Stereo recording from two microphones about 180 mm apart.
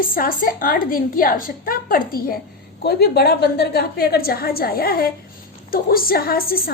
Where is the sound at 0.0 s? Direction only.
50° left (ahead or behind).